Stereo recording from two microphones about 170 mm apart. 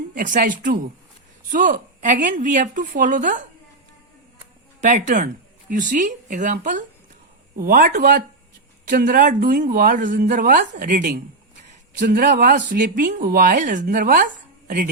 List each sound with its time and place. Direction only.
0.1 s a woman's voice: 55° right (ahead or behind)
4.8 s a woman's voice: 45° right (ahead or behind)